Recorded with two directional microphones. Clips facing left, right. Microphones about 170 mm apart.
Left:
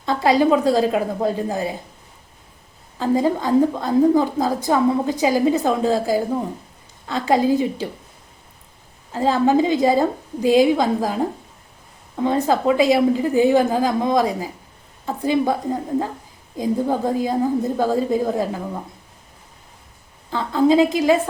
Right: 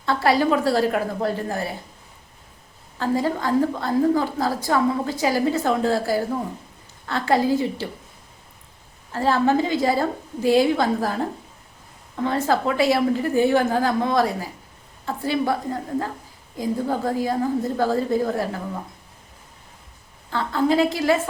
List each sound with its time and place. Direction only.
0.0 s a woman's voice: 20° left (ahead or behind)
3.0 s a woman's voice: 15° left (ahead or behind)
9.1 s a woman's voice: 15° left (ahead or behind)
20.3 s a woman's voice: 15° left (ahead or behind)